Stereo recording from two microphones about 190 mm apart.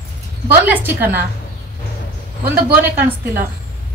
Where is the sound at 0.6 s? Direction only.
10° right (ahead or behind).